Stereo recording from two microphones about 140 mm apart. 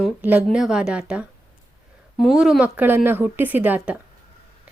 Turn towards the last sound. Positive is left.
turn(degrees=-10)  # may be behind; listen again after turning